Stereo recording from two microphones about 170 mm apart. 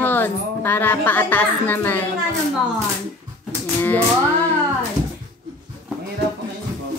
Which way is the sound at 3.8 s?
10° left (ahead or behind).